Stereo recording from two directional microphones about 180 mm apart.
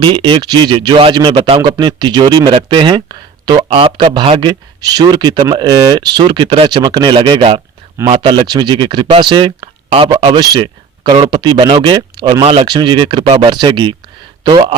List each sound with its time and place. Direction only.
0.0 s speech: 25° right (ahead or behind)